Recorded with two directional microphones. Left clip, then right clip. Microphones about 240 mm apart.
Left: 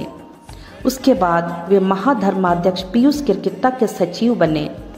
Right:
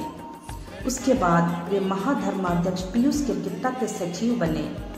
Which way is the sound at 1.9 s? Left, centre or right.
Left.